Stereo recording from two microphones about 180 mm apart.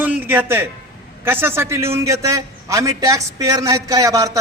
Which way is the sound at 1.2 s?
10° right (ahead or behind).